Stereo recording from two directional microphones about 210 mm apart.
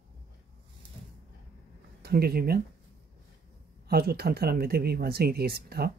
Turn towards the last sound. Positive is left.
turn(degrees=-50)  # may be behind; listen again after turning